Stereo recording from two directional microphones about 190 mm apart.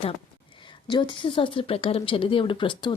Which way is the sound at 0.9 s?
25° left (ahead or behind).